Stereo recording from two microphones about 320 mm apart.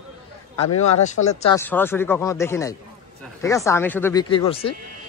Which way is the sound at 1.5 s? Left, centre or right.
Centre.